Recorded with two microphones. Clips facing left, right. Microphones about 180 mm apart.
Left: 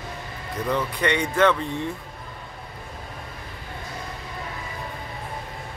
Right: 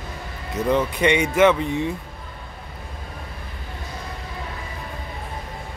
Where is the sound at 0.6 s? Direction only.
20° right (ahead or behind).